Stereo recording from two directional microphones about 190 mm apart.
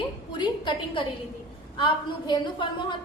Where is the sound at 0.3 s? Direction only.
25° left (ahead or behind).